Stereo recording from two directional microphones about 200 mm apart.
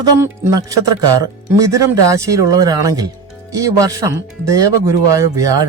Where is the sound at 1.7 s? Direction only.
15° right (ahead or behind).